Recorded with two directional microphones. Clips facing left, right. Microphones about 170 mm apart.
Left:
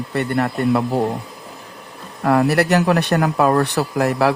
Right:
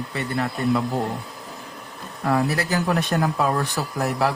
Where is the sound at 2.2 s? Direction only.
75° left (ahead or behind).